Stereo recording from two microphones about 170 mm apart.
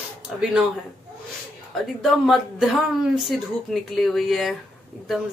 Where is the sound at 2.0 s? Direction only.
Centre (ahead or behind).